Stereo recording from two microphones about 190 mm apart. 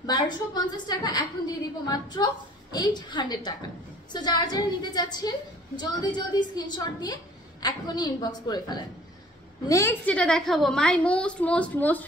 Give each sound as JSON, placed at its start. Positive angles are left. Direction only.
{"t": 0.0, "sound": "a woman's voice", "side_deg": 20}